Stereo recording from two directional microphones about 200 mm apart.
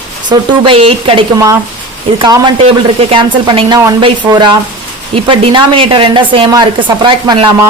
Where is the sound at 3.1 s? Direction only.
25° right (ahead or behind).